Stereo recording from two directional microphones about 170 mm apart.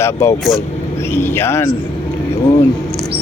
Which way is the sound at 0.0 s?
15° left (ahead or behind).